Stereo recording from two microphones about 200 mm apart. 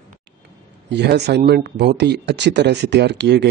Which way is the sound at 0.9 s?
60° right (ahead or behind).